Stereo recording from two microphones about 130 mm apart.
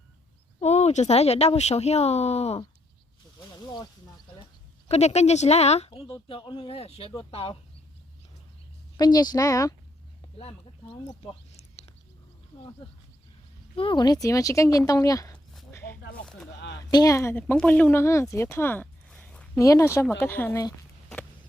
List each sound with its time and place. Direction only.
0.6 s speech: 55° left (ahead or behind)
3.5 s snake: 30° left (ahead or behind)
4.9 s speech: 55° left (ahead or behind)
6.1 s speech: 40° left (ahead or behind)
9.0 s speech: 30° left (ahead or behind)
11.5 s a sound: 50° left (ahead or behind)
13.7 s speech: 40° left (ahead or behind)
15.7 s snake: 15° left (ahead or behind)
16.9 s speech: 25° left (ahead or behind)
17.5 s speech: 10° left (ahead or behind)
18.0 s a woman's voice: 20° left (ahead or behind)
19.5 s speech: 25° left (ahead or behind)